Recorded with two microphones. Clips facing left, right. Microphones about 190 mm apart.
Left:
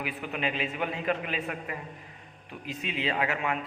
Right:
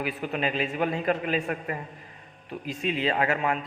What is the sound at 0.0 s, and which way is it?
A man's voice, 40° right (ahead or behind).